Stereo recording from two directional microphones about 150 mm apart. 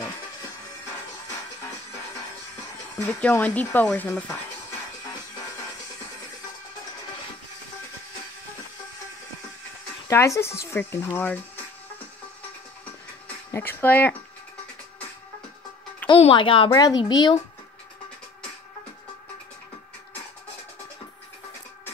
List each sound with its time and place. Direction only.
3.2 s speech: 10° left (ahead or behind)
10.0 s speech: 20° left (ahead or behind)
13.5 s speech: 15° left (ahead or behind)
16.1 s a child's voice: 35° left (ahead or behind)